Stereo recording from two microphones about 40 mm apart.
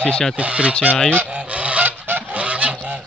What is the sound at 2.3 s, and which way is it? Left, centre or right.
Goose, right.